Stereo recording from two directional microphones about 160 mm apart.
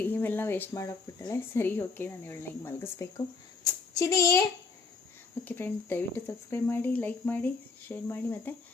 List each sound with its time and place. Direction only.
0.0 s speech: 15° left (ahead or behind)
3.6 s a sound: 20° left (ahead or behind)
5.5 s speech: 10° left (ahead or behind)